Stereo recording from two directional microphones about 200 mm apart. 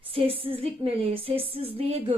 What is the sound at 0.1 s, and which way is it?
A woman's voice, 25° right (ahead or behind).